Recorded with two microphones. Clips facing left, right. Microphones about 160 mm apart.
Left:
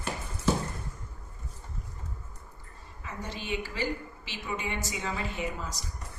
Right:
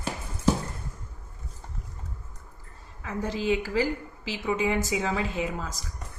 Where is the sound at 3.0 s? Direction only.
90° right.